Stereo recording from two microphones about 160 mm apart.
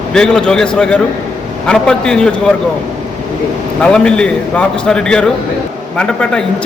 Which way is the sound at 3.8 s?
5° left (ahead or behind).